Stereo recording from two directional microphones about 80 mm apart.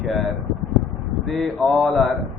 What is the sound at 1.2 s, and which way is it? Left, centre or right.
Speech, centre.